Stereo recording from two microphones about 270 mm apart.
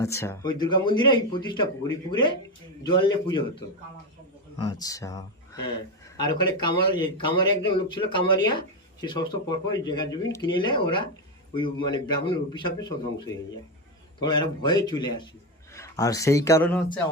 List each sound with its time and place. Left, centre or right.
0.0 s a man's voice: centre
4.5 s a man's voice: centre